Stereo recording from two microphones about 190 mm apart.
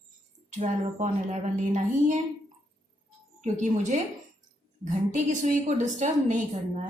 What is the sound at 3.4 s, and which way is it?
Speech, 40° right (ahead or behind).